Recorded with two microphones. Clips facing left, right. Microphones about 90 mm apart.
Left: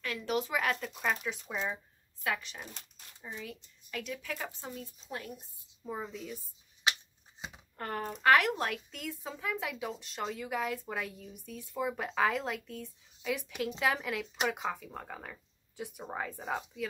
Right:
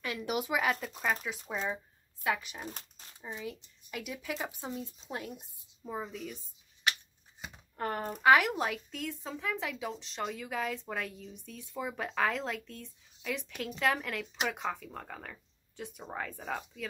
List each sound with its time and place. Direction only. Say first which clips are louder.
0.0 s a woman's voice: left 1 dB; 15° right (ahead or behind)
5.9 s a woman's voice: even; centre (ahead or behind)
7.7 s a woman's voice: right 2 dB; 10° right (ahead or behind)